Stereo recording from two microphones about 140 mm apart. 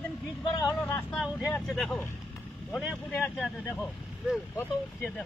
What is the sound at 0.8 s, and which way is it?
Speech, 15° left (ahead or behind).